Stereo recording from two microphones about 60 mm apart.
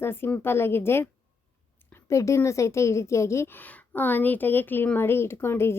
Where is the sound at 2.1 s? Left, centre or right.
Left.